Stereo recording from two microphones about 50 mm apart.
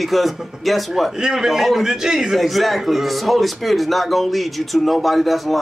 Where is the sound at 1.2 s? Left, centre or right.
Centre.